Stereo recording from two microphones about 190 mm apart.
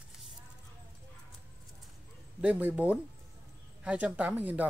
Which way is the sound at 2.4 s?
10° right (ahead or behind).